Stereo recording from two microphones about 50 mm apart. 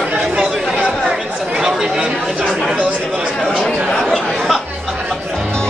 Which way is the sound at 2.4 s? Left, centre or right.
Centre.